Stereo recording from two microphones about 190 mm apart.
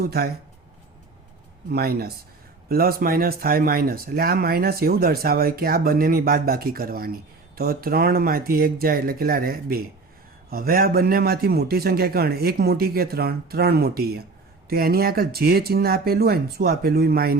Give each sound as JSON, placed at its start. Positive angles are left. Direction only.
{"t": 0.0, "sound": "speech", "side_deg": -55}
{"t": 1.7, "sound": "a man's voice", "side_deg": -55}